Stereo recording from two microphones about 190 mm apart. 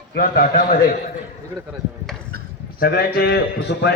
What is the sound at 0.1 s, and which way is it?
Speech, 50° left (ahead or behind).